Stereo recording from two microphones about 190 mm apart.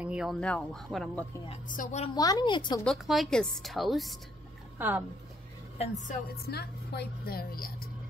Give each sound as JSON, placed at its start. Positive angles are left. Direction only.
{"t": 0.0, "sound": "speech", "side_deg": -5}
{"t": 1.8, "sound": "a woman's voice", "side_deg": 40}
{"t": 2.1, "sound": "a woman's voice", "side_deg": 20}
{"t": 2.8, "sound": "speech", "side_deg": 0}
{"t": 5.8, "sound": "a woman's voice", "side_deg": 40}
{"t": 6.5, "sound": "a woman's voice", "side_deg": 60}